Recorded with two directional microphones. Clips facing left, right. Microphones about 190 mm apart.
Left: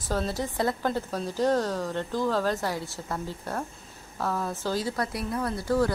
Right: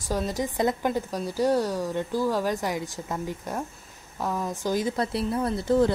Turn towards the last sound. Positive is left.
turn(degrees=-20)  # may be behind; listen again after turning